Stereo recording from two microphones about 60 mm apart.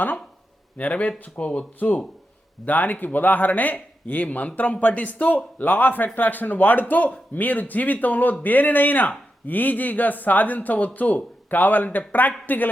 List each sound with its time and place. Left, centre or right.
0.8 s a man's voice: left